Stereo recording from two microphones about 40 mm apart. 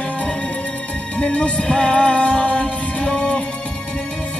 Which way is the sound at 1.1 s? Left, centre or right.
Left.